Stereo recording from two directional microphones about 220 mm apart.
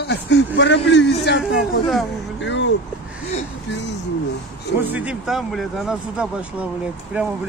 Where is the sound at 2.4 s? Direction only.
55° left (ahead or behind).